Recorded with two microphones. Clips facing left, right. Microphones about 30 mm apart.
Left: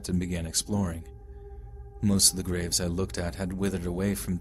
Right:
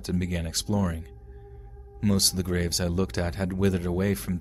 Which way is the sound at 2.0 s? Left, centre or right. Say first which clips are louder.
Right 1 dB; centre.